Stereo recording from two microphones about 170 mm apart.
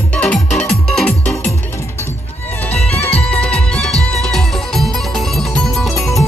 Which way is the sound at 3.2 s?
5° left (ahead or behind).